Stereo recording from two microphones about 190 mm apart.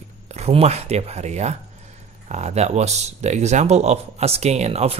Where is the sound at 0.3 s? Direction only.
35° right (ahead or behind).